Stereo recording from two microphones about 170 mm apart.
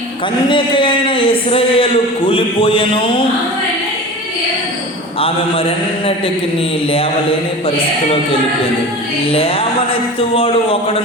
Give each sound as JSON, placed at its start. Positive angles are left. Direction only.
{"t": 0.4, "sound": "a man's voice", "side_deg": 30}
{"t": 6.9, "sound": "a man's voice", "side_deg": 35}